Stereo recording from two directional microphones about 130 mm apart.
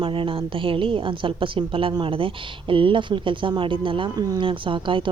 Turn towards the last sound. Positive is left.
turn(degrees=-40)  # may be behind; listen again after turning